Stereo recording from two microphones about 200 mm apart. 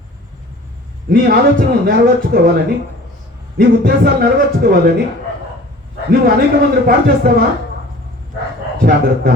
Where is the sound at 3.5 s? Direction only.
50° right (ahead or behind).